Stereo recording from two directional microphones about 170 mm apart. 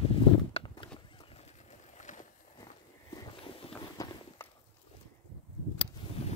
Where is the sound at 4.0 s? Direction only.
20° left (ahead or behind).